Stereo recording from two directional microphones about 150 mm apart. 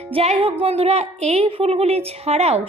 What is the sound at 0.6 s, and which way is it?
A woman's voice, 45° right (ahead or behind).